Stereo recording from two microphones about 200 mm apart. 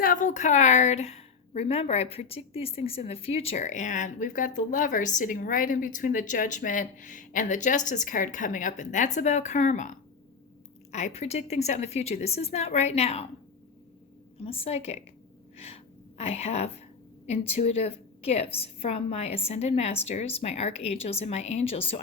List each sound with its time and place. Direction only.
0.0 s a woman's voice: 40° left (ahead or behind)
10.9 s a woman's voice: 35° left (ahead or behind)
14.4 s a woman's voice: 30° left (ahead or behind)
15.5 s a sound: 30° left (ahead or behind)
17.2 s a woman's voice: 35° left (ahead or behind)